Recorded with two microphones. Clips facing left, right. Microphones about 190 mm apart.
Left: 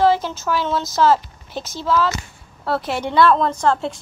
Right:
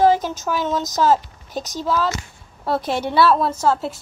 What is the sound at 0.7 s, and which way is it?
Child singing, 15° right (ahead or behind).